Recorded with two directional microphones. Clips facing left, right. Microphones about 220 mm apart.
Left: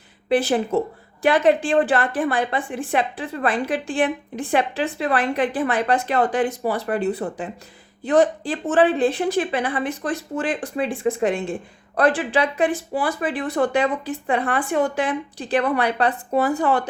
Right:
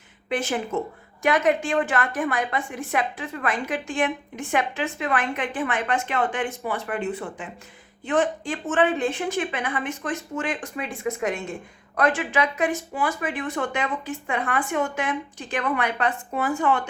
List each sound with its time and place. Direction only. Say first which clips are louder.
0.3 s a woman's voice: left 7 dB; 35° left (ahead or behind)